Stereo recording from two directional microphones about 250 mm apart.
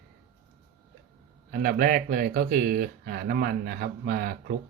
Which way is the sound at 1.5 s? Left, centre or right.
Right.